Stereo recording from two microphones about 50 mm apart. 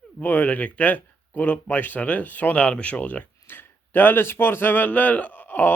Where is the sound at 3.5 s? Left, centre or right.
Left.